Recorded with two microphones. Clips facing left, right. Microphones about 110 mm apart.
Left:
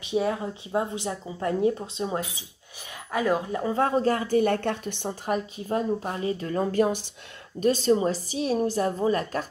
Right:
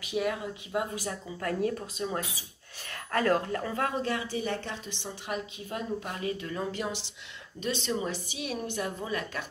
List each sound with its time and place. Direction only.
0.0 s speech: 30° left (ahead or behind)
2.9 s speech: 10° left (ahead or behind)
3.7 s speech: 35° left (ahead or behind)